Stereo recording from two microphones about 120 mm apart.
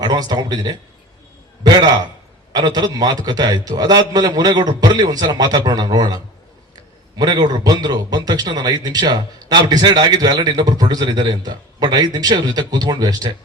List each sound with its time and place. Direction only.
0.0 s a man's voice: 35° right (ahead or behind)
7.2 s a man's voice: 35° right (ahead or behind)